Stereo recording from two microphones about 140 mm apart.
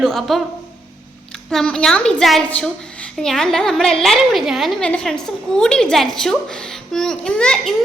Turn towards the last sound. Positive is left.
turn(degrees=5)  # may be behind; listen again after turning